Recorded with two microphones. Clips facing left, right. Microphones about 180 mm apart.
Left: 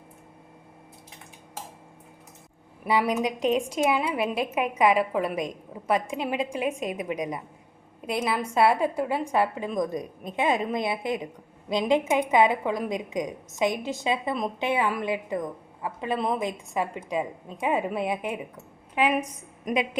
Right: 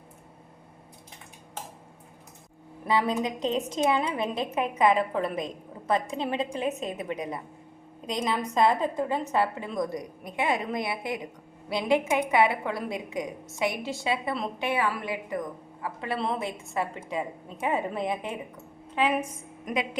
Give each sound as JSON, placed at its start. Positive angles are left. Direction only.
{"t": 2.8, "sound": "a woman's voice", "side_deg": 10}